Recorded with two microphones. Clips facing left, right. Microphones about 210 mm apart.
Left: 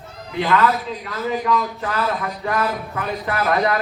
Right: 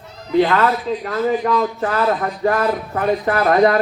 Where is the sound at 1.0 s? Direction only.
40° right (ahead or behind).